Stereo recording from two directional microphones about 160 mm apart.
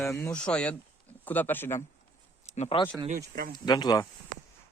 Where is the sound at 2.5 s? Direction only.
45° left (ahead or behind).